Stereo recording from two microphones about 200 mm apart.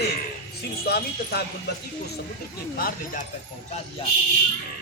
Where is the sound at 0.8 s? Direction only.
50° left (ahead or behind).